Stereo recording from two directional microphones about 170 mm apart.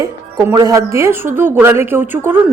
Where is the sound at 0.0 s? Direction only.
15° right (ahead or behind).